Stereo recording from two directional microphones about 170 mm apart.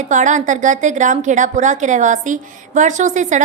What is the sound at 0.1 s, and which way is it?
A woman's voice, 45° right (ahead or behind).